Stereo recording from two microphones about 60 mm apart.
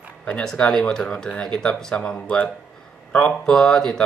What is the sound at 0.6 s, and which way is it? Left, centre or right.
Speech, left.